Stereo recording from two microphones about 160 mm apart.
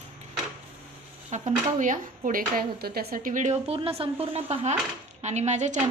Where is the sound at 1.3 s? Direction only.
50° right (ahead or behind).